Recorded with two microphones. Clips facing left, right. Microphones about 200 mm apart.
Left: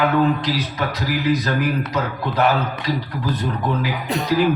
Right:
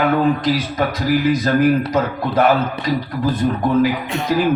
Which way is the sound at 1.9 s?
45° right (ahead or behind).